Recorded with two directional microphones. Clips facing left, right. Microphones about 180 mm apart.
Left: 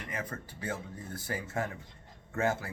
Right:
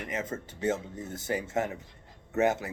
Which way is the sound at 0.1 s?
25° right (ahead or behind).